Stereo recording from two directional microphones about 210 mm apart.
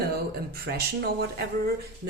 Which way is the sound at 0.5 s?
50° right (ahead or behind).